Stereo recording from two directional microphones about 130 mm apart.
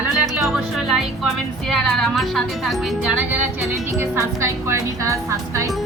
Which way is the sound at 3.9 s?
20° right (ahead or behind).